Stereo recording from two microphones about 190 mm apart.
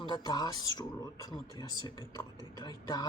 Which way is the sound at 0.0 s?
20° left (ahead or behind).